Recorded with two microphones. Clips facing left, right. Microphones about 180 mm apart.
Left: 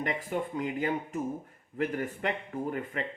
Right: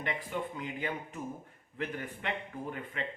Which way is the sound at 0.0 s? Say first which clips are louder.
Left 4 dB; 45° left (ahead or behind).